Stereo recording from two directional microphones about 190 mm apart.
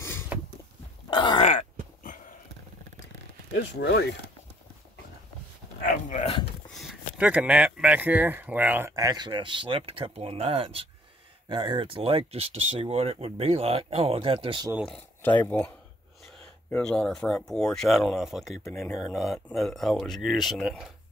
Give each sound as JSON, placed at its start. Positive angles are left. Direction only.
{"t": 1.1, "sound": "groan", "side_deg": 25}
{"t": 1.5, "sound": "a sound", "side_deg": 40}
{"t": 3.5, "sound": "speech", "side_deg": 65}
{"t": 6.0, "sound": "speech", "side_deg": 40}
{"t": 6.7, "sound": "speech", "side_deg": 0}
{"t": 14.9, "sound": "speech", "side_deg": 10}
{"t": 16.7, "sound": "speech", "side_deg": 5}
{"t": 18.6, "sound": "speech", "side_deg": 15}
{"t": 18.9, "sound": "speech", "side_deg": 0}